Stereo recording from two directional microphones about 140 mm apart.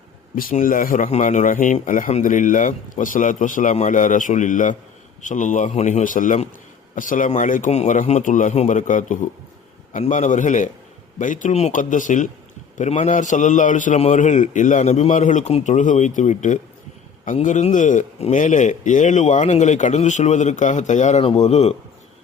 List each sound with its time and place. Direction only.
0.3 s a man's voice: 85° left; by 21.8 s 50° left (ahead or behind)